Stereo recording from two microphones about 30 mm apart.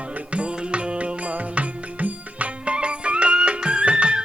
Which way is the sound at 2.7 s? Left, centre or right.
Right.